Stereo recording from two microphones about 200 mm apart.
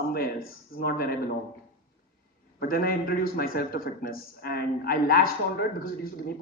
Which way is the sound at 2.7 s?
50° left (ahead or behind).